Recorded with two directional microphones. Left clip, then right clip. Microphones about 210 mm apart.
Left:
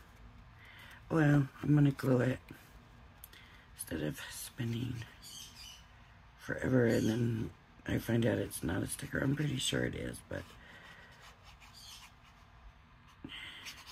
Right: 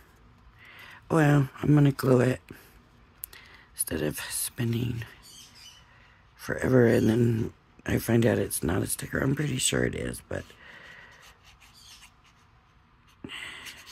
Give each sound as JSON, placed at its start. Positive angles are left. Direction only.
{"t": 0.7, "sound": "speech", "side_deg": -50}
{"t": 6.4, "sound": "speech", "side_deg": -50}
{"t": 13.3, "sound": "a sound", "side_deg": -50}